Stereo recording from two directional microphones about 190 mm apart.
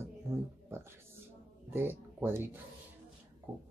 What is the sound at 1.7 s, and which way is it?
Speech, 10° right (ahead or behind).